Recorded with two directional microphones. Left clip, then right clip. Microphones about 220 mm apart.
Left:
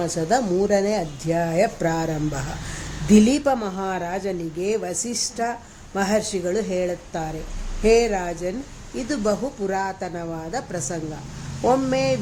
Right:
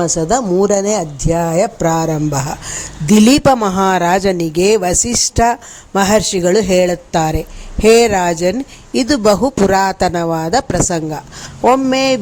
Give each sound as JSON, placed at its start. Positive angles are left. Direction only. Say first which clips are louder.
{"t": 0.0, "sound": "speech", "louder": "right 7 dB", "side_deg": -30}